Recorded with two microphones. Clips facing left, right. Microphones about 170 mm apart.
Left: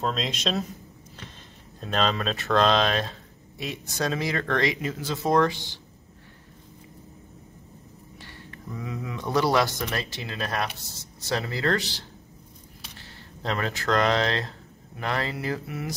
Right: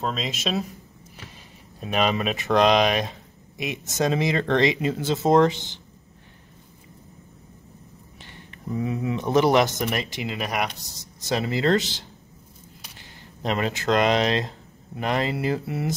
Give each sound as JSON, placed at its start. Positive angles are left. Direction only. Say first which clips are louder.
{"t": 0.0, "sound": "speech", "louder": "even", "side_deg": 0}
{"t": 1.8, "sound": "speech", "louder": "right 3 dB", "side_deg": -10}
{"t": 8.2, "sound": "speech", "louder": "even", "side_deg": -20}